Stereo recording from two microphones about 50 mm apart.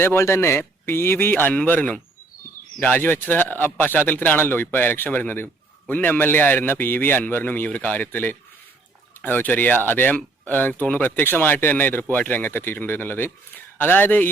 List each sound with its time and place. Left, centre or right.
0.2 s speech: left
1.5 s speech: left